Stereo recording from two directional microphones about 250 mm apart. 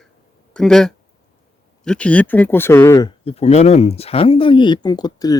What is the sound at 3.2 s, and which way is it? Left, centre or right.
Speech, left.